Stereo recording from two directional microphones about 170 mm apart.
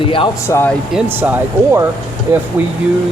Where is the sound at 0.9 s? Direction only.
10° right (ahead or behind).